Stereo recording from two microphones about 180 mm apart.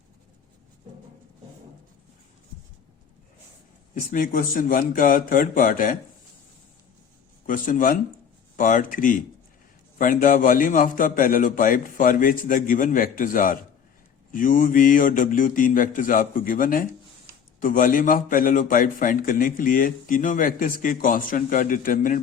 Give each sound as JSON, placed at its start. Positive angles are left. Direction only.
{"t": 4.1, "sound": "a man's voice", "side_deg": 50}
{"t": 7.4, "sound": "a man's voice", "side_deg": 50}